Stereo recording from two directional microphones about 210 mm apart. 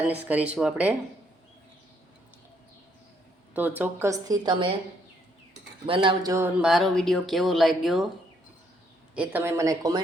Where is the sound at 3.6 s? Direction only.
10° right (ahead or behind).